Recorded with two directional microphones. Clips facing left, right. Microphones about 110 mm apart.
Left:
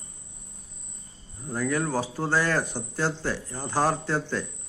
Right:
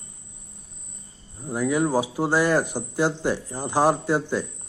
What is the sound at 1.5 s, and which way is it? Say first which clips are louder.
A man's voice: right 4 dB; 15° right (ahead or behind).